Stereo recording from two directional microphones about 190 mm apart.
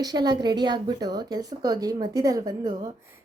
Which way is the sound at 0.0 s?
20° right (ahead or behind).